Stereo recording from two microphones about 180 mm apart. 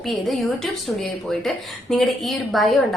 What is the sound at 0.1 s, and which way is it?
A woman's voice, centre (ahead or behind).